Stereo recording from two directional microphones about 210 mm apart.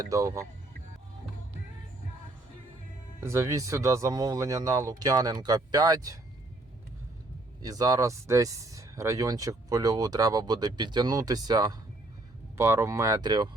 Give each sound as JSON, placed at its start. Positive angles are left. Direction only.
{"t": 0.0, "sound": "speech", "side_deg": -15}
{"t": 3.2, "sound": "speech", "side_deg": -10}
{"t": 7.6, "sound": "speech", "side_deg": -20}